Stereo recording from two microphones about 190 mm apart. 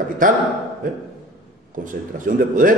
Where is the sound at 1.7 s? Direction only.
45° right (ahead or behind).